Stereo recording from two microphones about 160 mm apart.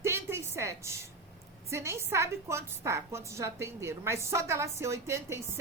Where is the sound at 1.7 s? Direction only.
15° right (ahead or behind).